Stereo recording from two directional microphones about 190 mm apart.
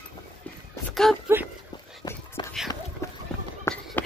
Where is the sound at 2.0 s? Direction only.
20° left (ahead or behind).